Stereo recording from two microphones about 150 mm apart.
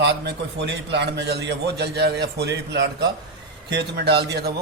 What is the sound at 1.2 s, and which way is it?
A man's voice, 90° right.